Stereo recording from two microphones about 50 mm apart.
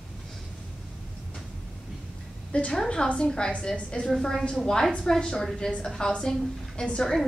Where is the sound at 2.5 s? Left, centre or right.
Left.